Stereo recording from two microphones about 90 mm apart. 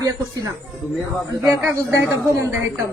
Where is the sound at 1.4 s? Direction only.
20° right (ahead or behind).